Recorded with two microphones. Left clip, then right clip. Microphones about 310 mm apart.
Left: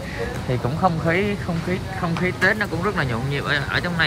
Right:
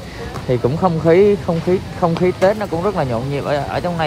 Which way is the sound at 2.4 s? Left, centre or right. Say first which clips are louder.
Right 4 dB; centre.